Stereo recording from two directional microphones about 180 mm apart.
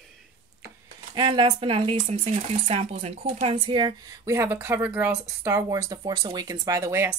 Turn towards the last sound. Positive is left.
turn(degrees=-15)  # may be behind; listen again after turning